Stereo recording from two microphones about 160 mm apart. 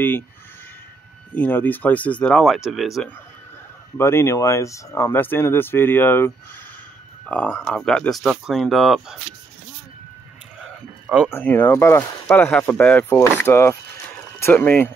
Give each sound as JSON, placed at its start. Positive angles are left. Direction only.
{"t": 1.3, "sound": "speech", "side_deg": 10}
{"t": 4.0, "sound": "speech", "side_deg": 15}
{"t": 10.6, "sound": "a sound", "side_deg": -5}
{"t": 11.3, "sound": "speech", "side_deg": 10}